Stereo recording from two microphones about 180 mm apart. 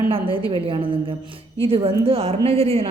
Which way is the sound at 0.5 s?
30° right (ahead or behind).